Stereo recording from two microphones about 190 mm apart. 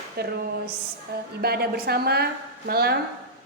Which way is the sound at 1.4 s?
55° right (ahead or behind).